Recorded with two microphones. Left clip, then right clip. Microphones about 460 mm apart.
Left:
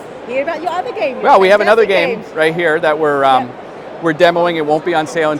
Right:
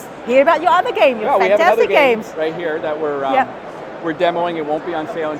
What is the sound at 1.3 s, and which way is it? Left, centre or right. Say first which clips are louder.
Speech: left 6 dB; left.